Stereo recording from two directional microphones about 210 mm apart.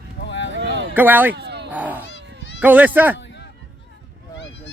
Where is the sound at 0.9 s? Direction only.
10° right (ahead or behind).